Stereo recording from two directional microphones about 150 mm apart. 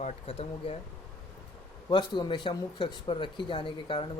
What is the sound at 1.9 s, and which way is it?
Speech, 30° left (ahead or behind).